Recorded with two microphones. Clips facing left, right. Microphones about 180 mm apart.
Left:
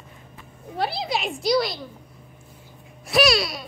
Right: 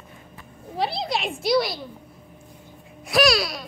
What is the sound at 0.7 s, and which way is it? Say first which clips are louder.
A woman's voice: even; centre (ahead or behind).